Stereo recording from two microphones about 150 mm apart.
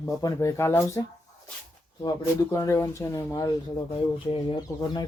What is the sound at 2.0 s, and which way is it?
Speech, 20° left (ahead or behind).